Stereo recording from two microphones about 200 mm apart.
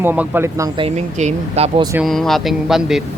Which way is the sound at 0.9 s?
35° right (ahead or behind).